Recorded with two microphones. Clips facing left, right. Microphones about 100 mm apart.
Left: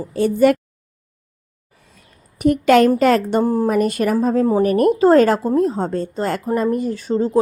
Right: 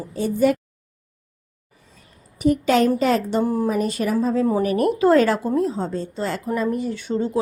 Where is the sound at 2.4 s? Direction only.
65° left (ahead or behind).